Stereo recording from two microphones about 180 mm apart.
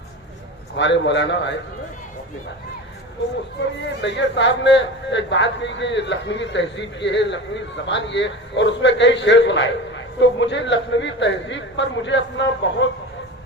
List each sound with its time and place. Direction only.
0.8 s a man's voice: 80° left
3.8 s a man's voice: 80° left